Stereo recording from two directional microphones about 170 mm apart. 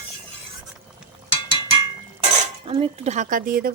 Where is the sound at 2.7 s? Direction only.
35° right (ahead or behind); by 3.7 s 55° right (ahead or behind).